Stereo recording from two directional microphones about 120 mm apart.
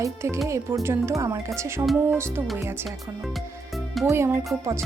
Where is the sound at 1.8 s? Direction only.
10° right (ahead or behind).